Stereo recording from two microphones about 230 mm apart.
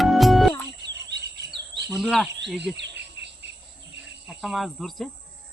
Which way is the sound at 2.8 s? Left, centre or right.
Right.